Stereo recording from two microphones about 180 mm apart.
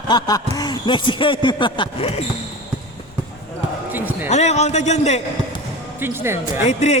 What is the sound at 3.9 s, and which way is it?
Basketball bounce, 10° right (ahead or behind).